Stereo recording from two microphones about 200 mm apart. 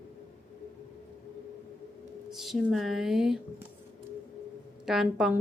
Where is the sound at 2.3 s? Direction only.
Centre (ahead or behind).